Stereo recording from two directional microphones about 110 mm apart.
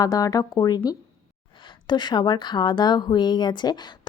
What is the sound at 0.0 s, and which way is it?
Speech, 35° left (ahead or behind).